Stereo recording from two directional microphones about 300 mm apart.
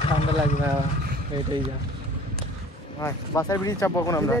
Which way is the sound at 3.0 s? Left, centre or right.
Centre.